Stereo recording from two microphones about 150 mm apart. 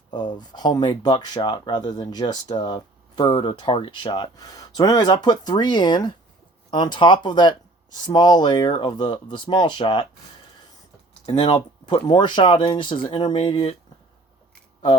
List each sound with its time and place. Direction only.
0.1 s speech: 30° left (ahead or behind)
11.3 s speech: 35° left (ahead or behind)
13.3 s speech: 45° left (ahead or behind)